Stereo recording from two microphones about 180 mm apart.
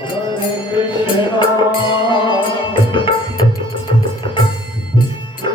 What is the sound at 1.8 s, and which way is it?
Music, 25° left (ahead or behind).